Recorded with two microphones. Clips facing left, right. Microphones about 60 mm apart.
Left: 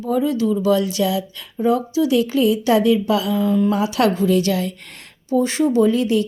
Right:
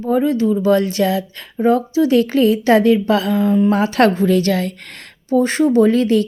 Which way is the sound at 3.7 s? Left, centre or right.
Right.